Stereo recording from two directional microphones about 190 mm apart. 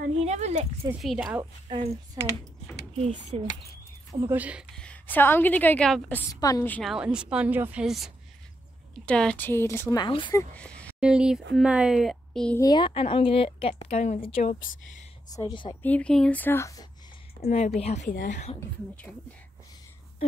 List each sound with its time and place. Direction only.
0.0 s a sound: 35° right (ahead or behind)
0.8 s a woman's voice: 5° right (ahead or behind)
1.4 s a woman's voice: 25° right (ahead or behind)
4.1 s speech: 15° right (ahead or behind)
4.7 s a woman's voice: 10° left (ahead or behind)
6.8 s a woman's voice: 5° right (ahead or behind); by 10.4 s 25° left (ahead or behind)
10.5 s a sound: 5° left (ahead or behind)
11.0 s a woman's voice: 5° right (ahead or behind)
12.5 s a woman's voice: 20° left (ahead or behind)
15.3 s a woman's voice: 20° left (ahead or behind)
15.8 s a woman's voice: 5° left (ahead or behind)
17.4 s speech: 35° left (ahead or behind)